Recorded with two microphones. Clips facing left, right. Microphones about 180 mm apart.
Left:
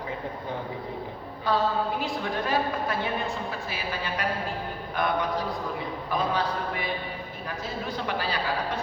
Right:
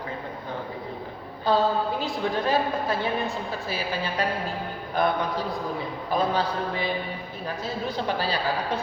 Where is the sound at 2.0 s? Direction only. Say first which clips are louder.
Right 3 dB; 30° right (ahead or behind).